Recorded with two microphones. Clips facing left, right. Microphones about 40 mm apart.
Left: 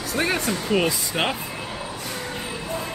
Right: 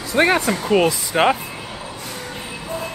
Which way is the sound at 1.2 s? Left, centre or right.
Right.